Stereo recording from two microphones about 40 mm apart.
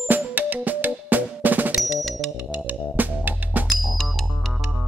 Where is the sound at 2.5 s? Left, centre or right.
Right.